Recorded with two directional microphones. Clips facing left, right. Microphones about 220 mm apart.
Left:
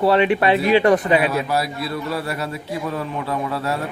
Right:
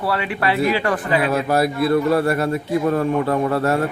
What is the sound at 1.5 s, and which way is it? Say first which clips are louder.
A man's voice: right 7 dB; 50° right (ahead or behind).